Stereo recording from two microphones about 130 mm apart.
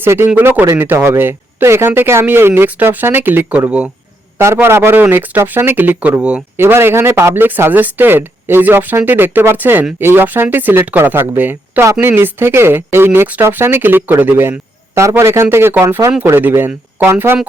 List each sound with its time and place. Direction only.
0.0 s speech: 20° right (ahead or behind)